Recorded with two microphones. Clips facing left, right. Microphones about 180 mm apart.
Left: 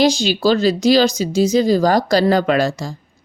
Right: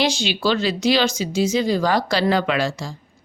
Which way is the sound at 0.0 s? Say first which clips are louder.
Left 6 dB; 40° left (ahead or behind).